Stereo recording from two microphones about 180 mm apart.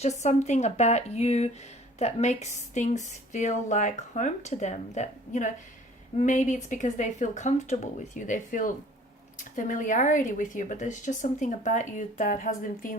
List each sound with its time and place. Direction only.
0.0 s a woman's voice: 40° left (ahead or behind)